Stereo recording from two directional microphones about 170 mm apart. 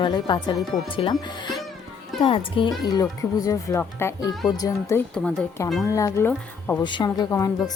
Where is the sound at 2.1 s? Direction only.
30° left (ahead or behind).